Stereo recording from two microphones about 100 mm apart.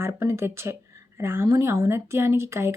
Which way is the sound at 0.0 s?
25° right (ahead or behind).